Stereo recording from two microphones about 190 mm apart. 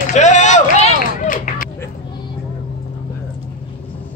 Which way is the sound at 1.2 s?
45° left (ahead or behind).